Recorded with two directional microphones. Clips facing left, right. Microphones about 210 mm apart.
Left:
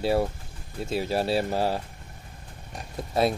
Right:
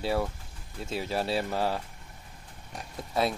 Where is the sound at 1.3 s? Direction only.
35° left (ahead or behind).